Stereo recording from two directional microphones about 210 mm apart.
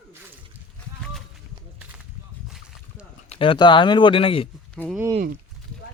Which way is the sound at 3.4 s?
25° left (ahead or behind).